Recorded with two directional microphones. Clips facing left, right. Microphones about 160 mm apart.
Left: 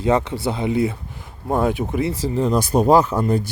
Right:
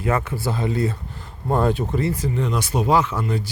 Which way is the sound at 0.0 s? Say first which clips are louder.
Left 4 dB; 20° left (ahead or behind).